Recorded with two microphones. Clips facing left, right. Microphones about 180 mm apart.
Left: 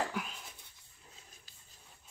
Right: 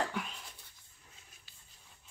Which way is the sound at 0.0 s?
5° left (ahead or behind).